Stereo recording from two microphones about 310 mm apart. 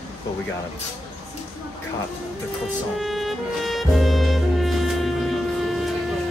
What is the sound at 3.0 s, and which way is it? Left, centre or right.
Music, centre.